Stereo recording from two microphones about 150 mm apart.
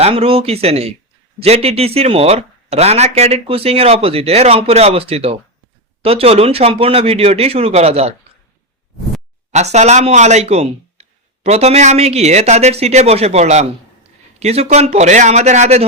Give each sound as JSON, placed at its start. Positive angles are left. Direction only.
{"t": 0.0, "sound": "speech", "side_deg": -40}
{"t": 9.5, "sound": "speech", "side_deg": -50}